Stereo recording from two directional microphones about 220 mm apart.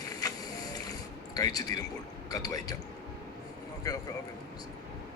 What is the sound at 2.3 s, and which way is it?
Speech, 15° left (ahead or behind).